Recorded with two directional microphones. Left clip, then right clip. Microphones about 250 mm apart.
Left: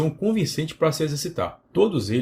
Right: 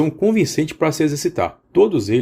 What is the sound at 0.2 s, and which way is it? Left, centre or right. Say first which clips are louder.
Speech: right 8 dB; right.